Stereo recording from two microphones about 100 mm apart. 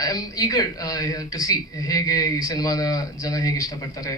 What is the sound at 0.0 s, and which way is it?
Speech, 40° left (ahead or behind).